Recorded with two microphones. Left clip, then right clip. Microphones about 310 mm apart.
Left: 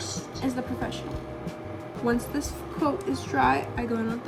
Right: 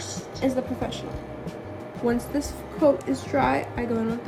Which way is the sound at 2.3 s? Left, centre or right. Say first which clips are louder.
Right 4 dB; centre.